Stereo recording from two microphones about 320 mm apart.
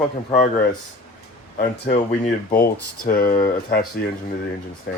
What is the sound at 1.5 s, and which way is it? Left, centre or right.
Speech, left.